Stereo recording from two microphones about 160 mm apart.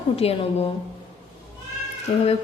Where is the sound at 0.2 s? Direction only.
40° left (ahead or behind).